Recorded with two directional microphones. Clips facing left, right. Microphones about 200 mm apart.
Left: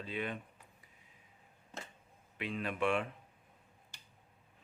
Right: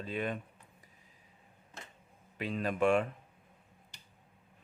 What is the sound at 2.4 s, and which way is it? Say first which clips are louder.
Speech: right 5 dB; 40° right (ahead or behind).